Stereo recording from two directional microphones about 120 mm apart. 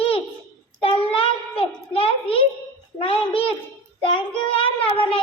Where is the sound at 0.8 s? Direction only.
50° left (ahead or behind).